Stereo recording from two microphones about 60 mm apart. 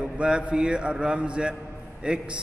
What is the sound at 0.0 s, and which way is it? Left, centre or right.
A man's voice, centre.